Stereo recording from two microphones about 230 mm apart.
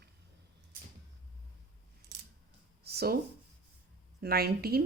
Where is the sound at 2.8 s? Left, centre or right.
Right.